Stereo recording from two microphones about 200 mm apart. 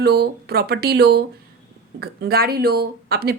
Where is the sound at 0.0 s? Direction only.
50° right (ahead or behind).